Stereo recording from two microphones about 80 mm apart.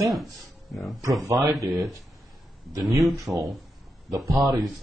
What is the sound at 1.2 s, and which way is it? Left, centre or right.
Speech, right.